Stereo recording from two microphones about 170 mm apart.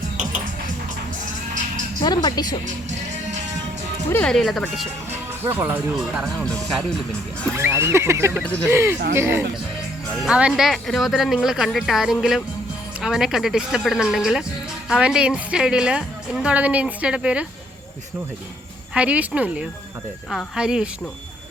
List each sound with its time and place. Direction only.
2.0 s speech: 25° left (ahead or behind)
4.1 s a woman's voice: 5° left (ahead or behind)
5.5 s speech: 10° right (ahead or behind)
6.2 s a woman's voice: 5° left (ahead or behind)
7.5 s speech: 15° right (ahead or behind)
8.4 s a woman's voice: 5° left (ahead or behind)
8.7 s a woman's voice: 15° right (ahead or behind)
18.9 s a woman's voice: 10° right (ahead or behind)